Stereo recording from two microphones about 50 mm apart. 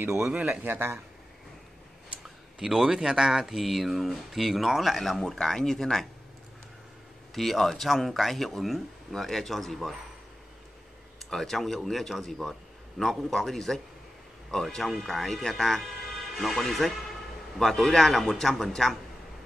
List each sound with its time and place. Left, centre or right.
0.7 s speech: right
2.6 s speech: centre
7.3 s speech: centre
11.2 s speech: centre